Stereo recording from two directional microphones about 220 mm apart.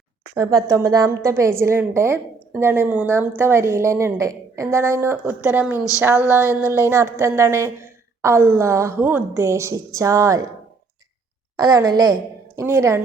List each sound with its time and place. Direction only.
0.3 s a woman's voice: 15° right (ahead or behind)
11.5 s a woman's voice: 15° right (ahead or behind)